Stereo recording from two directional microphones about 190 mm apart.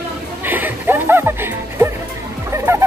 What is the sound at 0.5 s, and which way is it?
Music, 10° right (ahead or behind).